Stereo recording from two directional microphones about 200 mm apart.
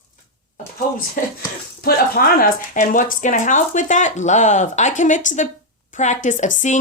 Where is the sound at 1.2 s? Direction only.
40° left (ahead or behind).